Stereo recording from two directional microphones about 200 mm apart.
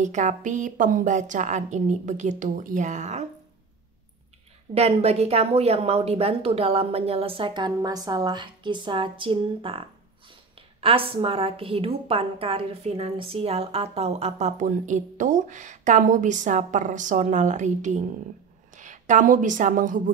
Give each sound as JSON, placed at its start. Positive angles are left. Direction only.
{"t": 0.0, "sound": "a woman's voice", "side_deg": -35}
{"t": 4.7, "sound": "a woman's voice", "side_deg": -30}